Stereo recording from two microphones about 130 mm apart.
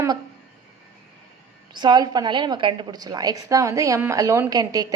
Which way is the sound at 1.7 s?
35° right (ahead or behind).